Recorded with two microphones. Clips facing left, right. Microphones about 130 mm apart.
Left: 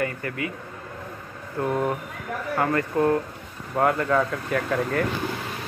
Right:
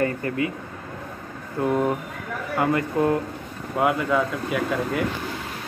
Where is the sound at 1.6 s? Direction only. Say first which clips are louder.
Right 2 dB; 15° right (ahead or behind).